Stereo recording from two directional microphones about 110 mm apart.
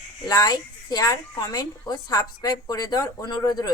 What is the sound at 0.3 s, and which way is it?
A woman's voice, 40° left (ahead or behind).